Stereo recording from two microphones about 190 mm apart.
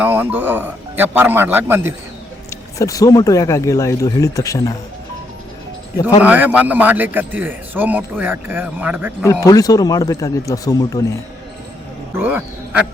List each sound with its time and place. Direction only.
0.0 s a man's voice: 10° right (ahead or behind)
2.5 s speech: 15° left (ahead or behind)
6.2 s a man's voice: 10° right (ahead or behind)
9.2 s speech: 15° left (ahead or behind)
12.1 s speech: 10° right (ahead or behind)